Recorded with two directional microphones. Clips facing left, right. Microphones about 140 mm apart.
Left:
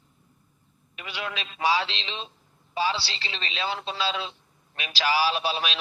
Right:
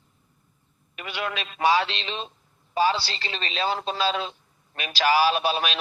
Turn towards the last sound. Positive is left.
turn(degrees=-50)  # may be behind; listen again after turning